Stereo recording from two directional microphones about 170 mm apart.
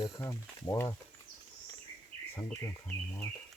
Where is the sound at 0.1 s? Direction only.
20° left (ahead or behind).